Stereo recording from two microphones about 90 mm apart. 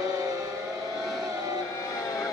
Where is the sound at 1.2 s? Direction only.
45° right (ahead or behind).